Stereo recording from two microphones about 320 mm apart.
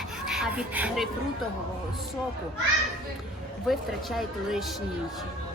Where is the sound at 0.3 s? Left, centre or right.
Centre.